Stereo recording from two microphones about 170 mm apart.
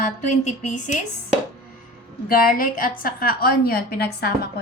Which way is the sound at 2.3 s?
60° left (ahead or behind).